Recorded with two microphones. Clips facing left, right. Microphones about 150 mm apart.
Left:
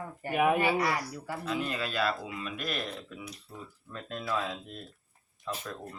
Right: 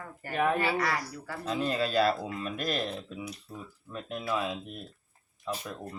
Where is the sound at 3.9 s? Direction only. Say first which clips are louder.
Right 2 dB; 15° right (ahead or behind).